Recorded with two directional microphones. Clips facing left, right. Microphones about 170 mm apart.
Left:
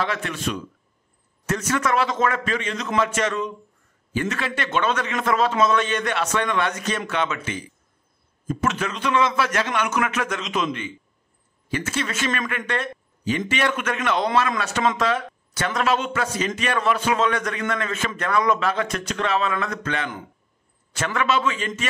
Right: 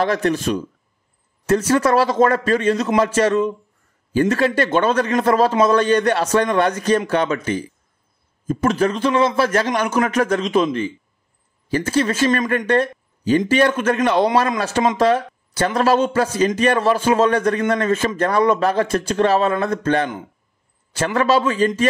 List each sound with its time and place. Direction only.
0.0 s a man's voice: 40° right (ahead or behind)